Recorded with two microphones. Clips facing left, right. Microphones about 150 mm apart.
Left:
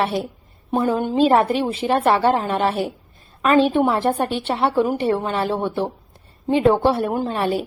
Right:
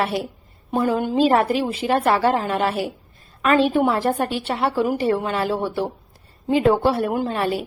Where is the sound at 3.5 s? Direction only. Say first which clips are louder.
Left 1 dB; 25° left (ahead or behind).